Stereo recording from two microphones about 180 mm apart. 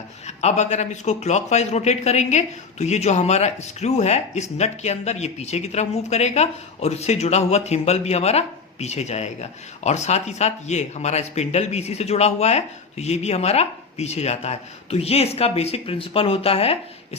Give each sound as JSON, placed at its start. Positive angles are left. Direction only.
{"t": 0.3, "sound": "a man's voice", "side_deg": 40}